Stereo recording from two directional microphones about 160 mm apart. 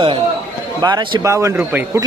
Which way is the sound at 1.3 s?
15° right (ahead or behind).